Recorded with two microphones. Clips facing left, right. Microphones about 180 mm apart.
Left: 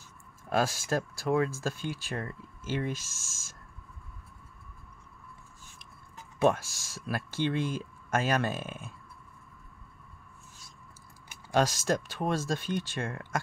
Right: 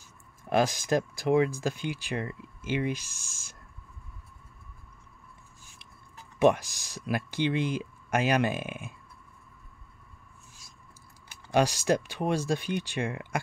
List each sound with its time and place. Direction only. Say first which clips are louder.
0.5 s speech: right 3 dB; 15° right (ahead or behind)
6.4 s speech: right 3 dB; 15° right (ahead or behind)
11.5 s speech: right 2 dB; 15° right (ahead or behind)